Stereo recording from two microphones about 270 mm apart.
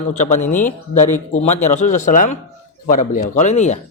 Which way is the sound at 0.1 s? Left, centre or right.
Left.